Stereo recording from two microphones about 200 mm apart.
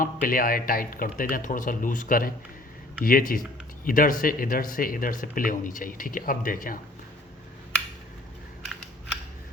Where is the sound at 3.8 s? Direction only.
45° left (ahead or behind).